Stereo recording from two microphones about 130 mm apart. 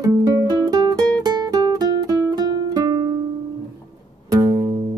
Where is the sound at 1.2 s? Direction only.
30° right (ahead or behind).